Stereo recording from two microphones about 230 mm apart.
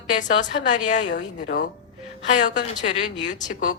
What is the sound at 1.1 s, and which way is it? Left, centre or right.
Speech, left.